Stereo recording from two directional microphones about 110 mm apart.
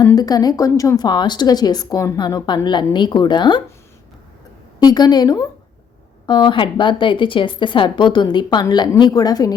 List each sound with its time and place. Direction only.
0.2 s a woman's voice: 35° left (ahead or behind)
4.8 s a woman's voice: 40° left (ahead or behind)